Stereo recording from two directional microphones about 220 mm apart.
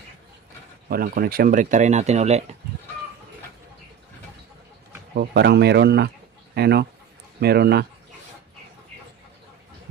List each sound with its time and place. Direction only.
0.8 s speech: 40° right (ahead or behind)
5.1 s speech: 50° right (ahead or behind)